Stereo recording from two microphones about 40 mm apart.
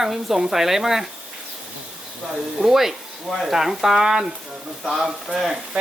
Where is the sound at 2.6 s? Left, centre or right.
Centre.